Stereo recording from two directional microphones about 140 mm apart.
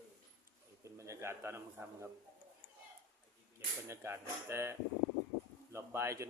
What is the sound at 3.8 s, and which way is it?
A man's voice, 20° right (ahead or behind).